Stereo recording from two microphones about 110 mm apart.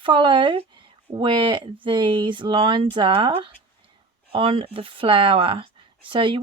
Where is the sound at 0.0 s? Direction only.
50° right (ahead or behind).